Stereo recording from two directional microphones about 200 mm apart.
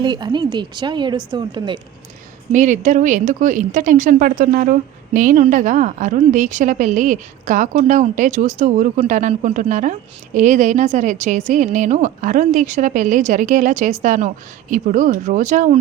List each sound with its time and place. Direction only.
0.0 s a woman's voice: 20° right (ahead or behind)
2.5 s speech: 40° right (ahead or behind)